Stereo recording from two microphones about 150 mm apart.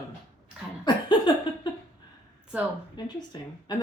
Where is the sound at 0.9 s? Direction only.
30° left (ahead or behind).